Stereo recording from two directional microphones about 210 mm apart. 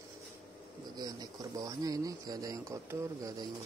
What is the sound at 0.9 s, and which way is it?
Speech, 20° right (ahead or behind).